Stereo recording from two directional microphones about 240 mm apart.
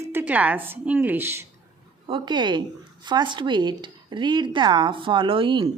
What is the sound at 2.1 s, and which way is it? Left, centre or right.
Speech, centre.